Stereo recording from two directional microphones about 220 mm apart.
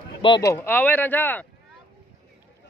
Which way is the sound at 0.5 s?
10° left (ahead or behind).